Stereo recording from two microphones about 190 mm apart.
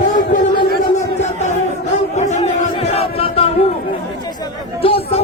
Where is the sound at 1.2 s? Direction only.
40° left (ahead or behind).